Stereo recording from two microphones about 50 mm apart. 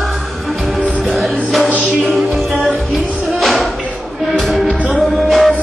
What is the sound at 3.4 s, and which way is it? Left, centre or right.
Music, centre.